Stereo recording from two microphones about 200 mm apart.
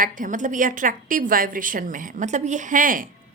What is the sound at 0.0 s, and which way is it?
A woman's voice, 40° right (ahead or behind).